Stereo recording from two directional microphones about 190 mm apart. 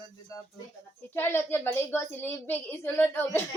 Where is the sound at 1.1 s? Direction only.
10° left (ahead or behind).